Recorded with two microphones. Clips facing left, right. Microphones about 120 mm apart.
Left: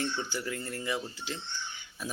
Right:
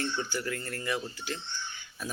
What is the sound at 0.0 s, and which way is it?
Speech, 20° left (ahead or behind).